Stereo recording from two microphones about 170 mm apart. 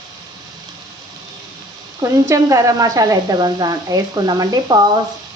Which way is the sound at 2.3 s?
20° right (ahead or behind).